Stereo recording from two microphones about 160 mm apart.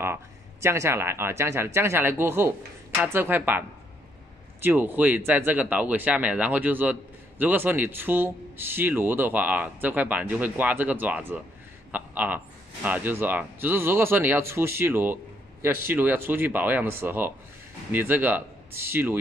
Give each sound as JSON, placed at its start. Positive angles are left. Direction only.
{"t": 0.0, "sound": "speech", "side_deg": -15}